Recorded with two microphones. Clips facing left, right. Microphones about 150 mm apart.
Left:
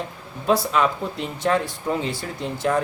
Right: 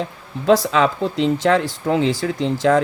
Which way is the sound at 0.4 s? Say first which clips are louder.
Right 5 dB; 90° right.